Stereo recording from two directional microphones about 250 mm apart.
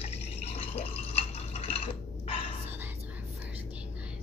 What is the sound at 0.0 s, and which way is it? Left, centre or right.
Drip, left.